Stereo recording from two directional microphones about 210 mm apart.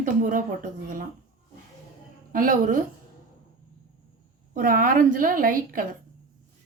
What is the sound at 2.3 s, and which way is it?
Speech, 40° right (ahead or behind).